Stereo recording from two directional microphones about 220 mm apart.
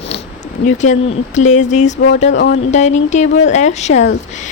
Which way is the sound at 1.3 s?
30° left (ahead or behind).